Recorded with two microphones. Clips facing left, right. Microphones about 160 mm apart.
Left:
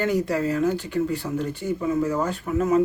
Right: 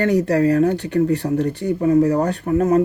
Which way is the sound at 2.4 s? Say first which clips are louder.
Right 6 dB; 40° right (ahead or behind).